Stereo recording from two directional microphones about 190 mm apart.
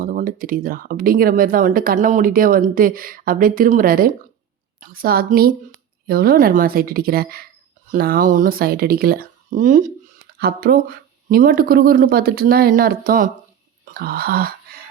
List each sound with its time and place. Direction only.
0.0 s speech: 45° right (ahead or behind)